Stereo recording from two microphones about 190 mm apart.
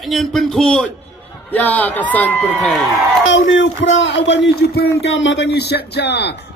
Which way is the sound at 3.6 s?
75° left (ahead or behind).